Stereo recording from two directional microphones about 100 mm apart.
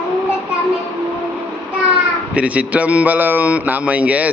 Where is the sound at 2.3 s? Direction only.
15° right (ahead or behind).